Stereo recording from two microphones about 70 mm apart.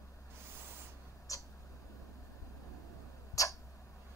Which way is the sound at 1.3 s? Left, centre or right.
Left.